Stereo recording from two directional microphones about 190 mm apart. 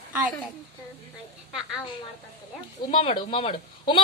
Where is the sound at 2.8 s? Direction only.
30° left (ahead or behind).